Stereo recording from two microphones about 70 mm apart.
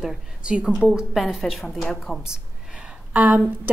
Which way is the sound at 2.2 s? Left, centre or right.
Centre.